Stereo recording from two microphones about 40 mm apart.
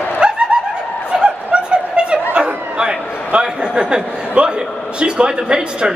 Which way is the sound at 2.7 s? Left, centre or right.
Right.